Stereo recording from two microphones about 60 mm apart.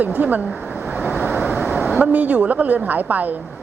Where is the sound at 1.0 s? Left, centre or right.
Right.